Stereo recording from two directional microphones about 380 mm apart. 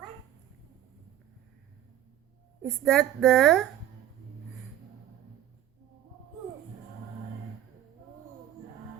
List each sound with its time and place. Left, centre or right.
2.6 s speech: centre